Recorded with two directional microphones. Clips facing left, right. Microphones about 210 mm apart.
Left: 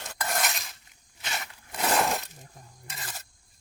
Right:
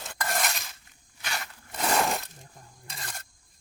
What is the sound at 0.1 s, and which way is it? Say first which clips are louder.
Dishes: even; centre (ahead or behind).